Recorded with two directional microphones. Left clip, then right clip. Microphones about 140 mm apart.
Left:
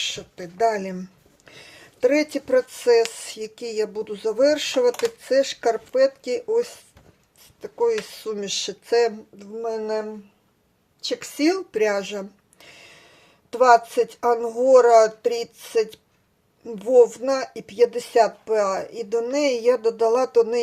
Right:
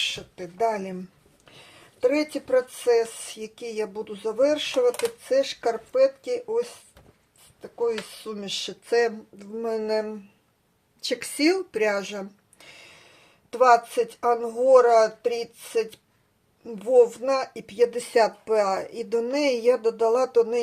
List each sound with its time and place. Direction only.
0.1 s speech: 15° left (ahead or behind)
9.4 s speech: 5° right (ahead or behind)
11.1 s speech: centre (ahead or behind)
11.7 s speech: 15° left (ahead or behind)
18.0 s speech: centre (ahead or behind)